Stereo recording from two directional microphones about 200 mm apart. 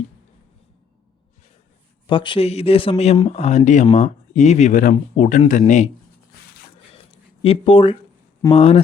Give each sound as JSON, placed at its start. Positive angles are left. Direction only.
{"t": 2.0, "sound": "speech", "side_deg": 25}
{"t": 7.4, "sound": "speech", "side_deg": 30}